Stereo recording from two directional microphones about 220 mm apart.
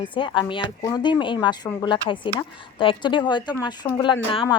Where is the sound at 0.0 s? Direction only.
20° left (ahead or behind).